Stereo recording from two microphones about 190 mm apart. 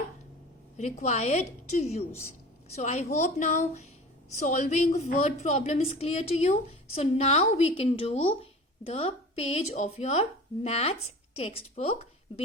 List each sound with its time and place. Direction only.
0.8 s a woman's voice: 35° left (ahead or behind)